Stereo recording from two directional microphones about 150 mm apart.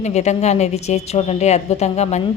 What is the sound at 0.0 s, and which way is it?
A woman's voice, 50° left (ahead or behind).